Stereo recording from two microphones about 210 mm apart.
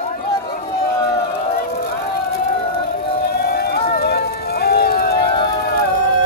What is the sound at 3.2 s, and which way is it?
Run, 50° left (ahead or behind).